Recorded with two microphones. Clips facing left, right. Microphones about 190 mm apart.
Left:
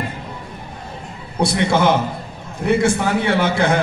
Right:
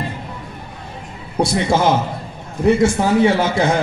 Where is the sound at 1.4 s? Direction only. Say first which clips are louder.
Right 1 dB; 60° left (ahead or behind).